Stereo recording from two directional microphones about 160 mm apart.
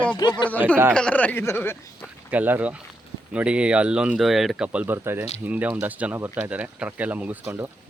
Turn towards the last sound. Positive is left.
turn(degrees=-10)  # may be behind; listen again after turning